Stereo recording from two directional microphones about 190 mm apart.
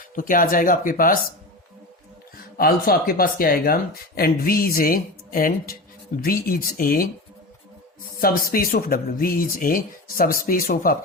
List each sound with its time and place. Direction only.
0.2 s speech: 45° left (ahead or behind)
2.6 s speech: 50° left (ahead or behind)
8.2 s speech: 50° left (ahead or behind)